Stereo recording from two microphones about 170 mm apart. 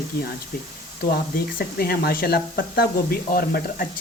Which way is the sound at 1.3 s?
65° left (ahead or behind).